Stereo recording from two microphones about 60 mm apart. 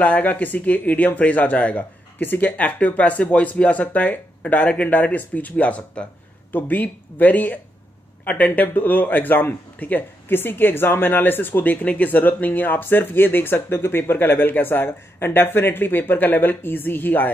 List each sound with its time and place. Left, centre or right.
0.0 s a man's voice: left